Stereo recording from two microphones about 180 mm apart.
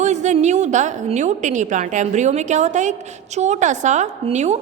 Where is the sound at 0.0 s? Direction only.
40° right (ahead or behind).